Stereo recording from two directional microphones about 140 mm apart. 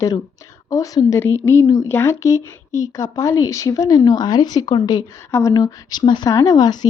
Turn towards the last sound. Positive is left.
turn(degrees=30)  # may be behind; listen again after turning